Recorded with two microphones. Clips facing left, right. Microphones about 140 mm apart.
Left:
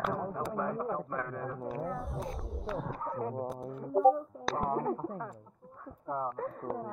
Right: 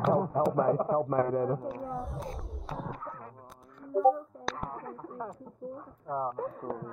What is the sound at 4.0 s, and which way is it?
Speech, centre (ahead or behind).